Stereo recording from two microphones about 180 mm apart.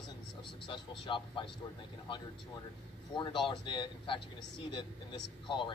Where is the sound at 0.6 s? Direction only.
25° left (ahead or behind).